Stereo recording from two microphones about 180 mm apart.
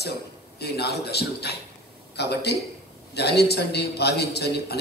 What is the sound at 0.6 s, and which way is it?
A man's voice, 65° left (ahead or behind).